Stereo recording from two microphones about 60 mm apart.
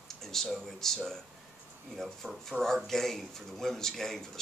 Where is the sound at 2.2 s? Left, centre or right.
Right.